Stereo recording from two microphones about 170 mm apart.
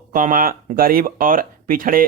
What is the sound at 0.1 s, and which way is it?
Speech, 55° right (ahead or behind).